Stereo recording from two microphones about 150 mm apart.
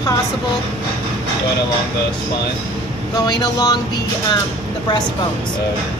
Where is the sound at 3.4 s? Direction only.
25° left (ahead or behind).